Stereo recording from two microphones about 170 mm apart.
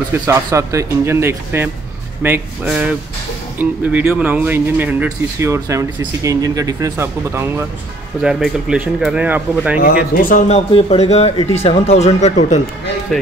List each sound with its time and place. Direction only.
0.1 s speech: 15° right (ahead or behind)
8.2 s speech: 5° right (ahead or behind)
9.8 s a man's voice: 55° left (ahead or behind)
10.7 s speech: 35° left (ahead or behind)
13.1 s speech: centre (ahead or behind)